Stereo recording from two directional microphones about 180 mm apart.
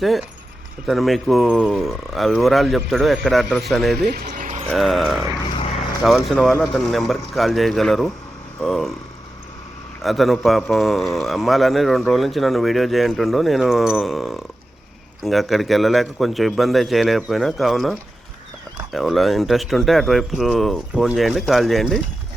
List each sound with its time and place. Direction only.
0.0 s a man's voice: centre (ahead or behind)
3.9 s speech: 60° right (ahead or behind)
4.7 s a man's voice: centre (ahead or behind)
5.5 s vehicle: 35° left (ahead or behind)
6.0 s a man's voice: centre (ahead or behind)
10.0 s a man's voice: centre (ahead or behind)